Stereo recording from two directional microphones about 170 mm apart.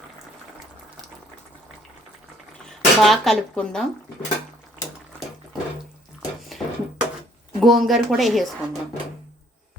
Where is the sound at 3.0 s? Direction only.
Centre (ahead or behind).